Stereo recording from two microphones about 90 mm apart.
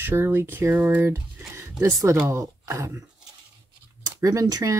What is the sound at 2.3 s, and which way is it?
Speech, 35° right (ahead or behind).